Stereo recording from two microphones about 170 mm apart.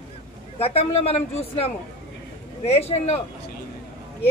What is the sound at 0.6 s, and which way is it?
A woman's voice, 35° left (ahead or behind).